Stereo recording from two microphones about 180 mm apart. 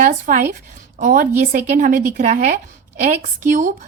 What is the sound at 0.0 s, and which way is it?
A woman's voice, 45° right (ahead or behind).